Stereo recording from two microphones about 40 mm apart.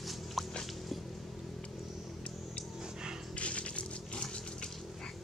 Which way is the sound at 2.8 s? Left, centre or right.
Centre.